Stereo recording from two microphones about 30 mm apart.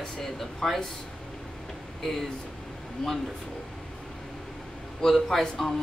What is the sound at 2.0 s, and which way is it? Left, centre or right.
Speech, centre.